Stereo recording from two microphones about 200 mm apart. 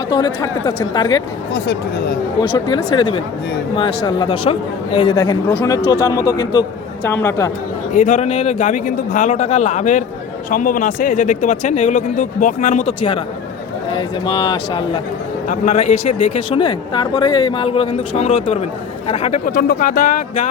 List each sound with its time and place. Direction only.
0.1 s speech: 20° left (ahead or behind)
1.5 s speech: 55° left (ahead or behind)
2.4 s speech: 25° left (ahead or behind)
7.9 s speech: 35° left (ahead or behind)
13.9 s speech: 20° left (ahead or behind)
15.4 s speech: 35° left (ahead or behind)